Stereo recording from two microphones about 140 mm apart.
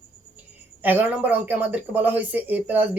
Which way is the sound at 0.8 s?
15° right (ahead or behind).